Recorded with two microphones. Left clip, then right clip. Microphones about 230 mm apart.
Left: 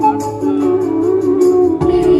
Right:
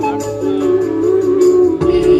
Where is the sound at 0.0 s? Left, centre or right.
Left.